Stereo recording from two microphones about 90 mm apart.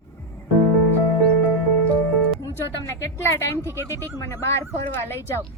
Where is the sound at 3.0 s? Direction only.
30° left (ahead or behind).